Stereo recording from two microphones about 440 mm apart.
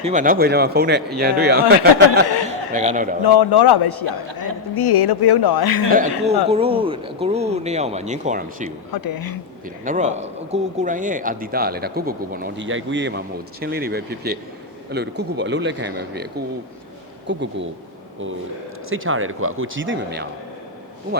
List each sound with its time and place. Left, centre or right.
0.0 s speech: centre
3.2 s speech: left
5.9 s speech: centre
8.9 s speech: left
9.6 s speech: centre
18.9 s speech: right